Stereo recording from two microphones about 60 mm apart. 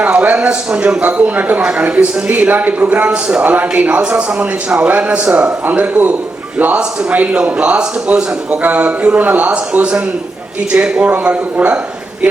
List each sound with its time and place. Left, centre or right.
0.0 s a man's voice: right
8.6 s a man's voice: right